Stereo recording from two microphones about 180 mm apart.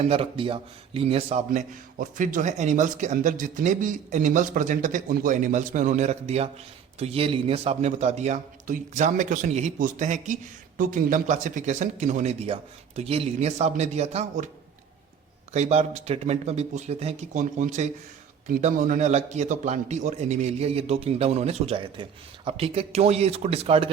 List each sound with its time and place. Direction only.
0.0 s a man's voice: 30° right (ahead or behind)
15.5 s a man's voice: 35° right (ahead or behind)